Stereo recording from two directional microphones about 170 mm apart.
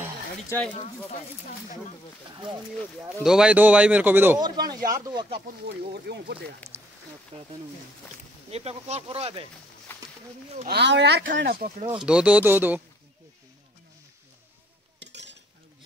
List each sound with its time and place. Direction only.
3.2 s a man's voice: 5° right (ahead or behind)
4.4 s speech: 25° right (ahead or behind)
6.0 s speech: 75° right (ahead or behind)
7.3 s speech: 35° right (ahead or behind)
9.9 s a sound: 10° left (ahead or behind)
10.7 s speech: 90° right; by 11.7 s 60° right (ahead or behind)
12.0 s a man's voice: 5° right (ahead or behind)
15.0 s stir: 90° right